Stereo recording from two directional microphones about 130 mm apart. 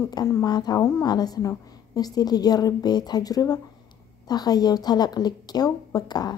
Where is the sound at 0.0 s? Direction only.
25° left (ahead or behind).